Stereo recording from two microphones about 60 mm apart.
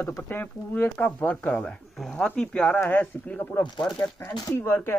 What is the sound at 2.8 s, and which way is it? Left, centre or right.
Speech, left.